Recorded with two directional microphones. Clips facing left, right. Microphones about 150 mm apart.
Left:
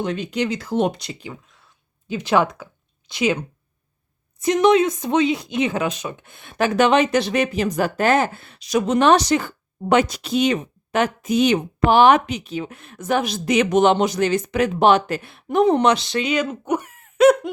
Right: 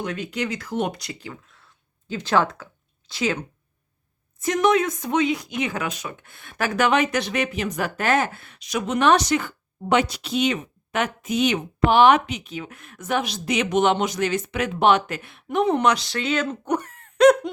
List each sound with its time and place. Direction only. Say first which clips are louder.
0.0 s speech: left 4 dB; 25° left (ahead or behind)
2.0 s speech: left 3 dB; 15° left (ahead or behind)